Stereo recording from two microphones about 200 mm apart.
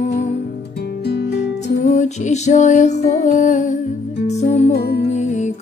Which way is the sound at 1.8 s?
35° left (ahead or behind).